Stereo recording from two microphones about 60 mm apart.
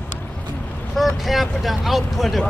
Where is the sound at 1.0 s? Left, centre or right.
Centre.